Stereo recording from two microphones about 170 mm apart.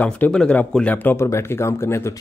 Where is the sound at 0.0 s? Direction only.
10° left (ahead or behind).